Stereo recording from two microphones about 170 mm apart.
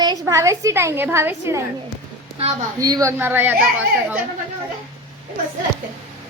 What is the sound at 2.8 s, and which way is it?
Speech, 20° right (ahead or behind).